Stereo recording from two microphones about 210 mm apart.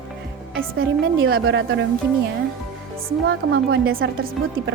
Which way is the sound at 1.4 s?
55° right (ahead or behind).